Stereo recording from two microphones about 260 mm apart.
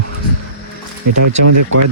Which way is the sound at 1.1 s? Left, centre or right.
Right.